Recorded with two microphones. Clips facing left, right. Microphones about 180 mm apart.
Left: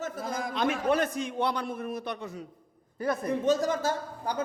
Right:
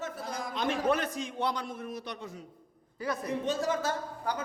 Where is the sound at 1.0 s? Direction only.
55° left (ahead or behind); by 3.7 s 40° left (ahead or behind).